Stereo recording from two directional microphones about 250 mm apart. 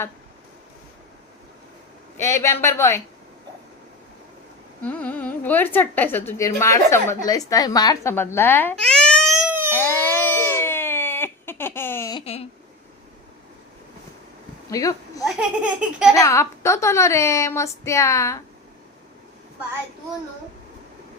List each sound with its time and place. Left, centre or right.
2.1 s a woman's voice: centre
4.8 s a woman's voice: centre
9.7 s a sound: centre
12.2 s a sound: left
14.7 s speech: centre
15.2 s baby laughter: centre
16.1 s a woman's voice: centre